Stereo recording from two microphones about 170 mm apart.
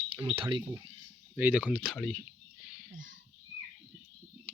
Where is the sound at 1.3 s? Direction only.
10° right (ahead or behind).